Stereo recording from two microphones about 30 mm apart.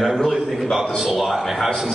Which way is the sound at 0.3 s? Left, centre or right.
Centre.